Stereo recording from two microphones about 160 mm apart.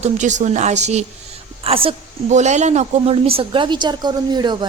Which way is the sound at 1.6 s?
35° right (ahead or behind).